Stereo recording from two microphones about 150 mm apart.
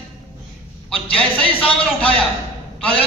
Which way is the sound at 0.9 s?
5° left (ahead or behind).